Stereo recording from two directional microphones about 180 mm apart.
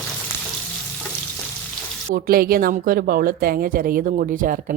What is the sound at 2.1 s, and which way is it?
A woman's voice, 55° right (ahead or behind).